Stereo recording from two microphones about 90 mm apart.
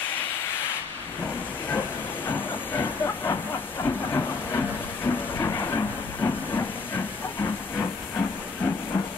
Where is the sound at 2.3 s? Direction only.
25° left (ahead or behind).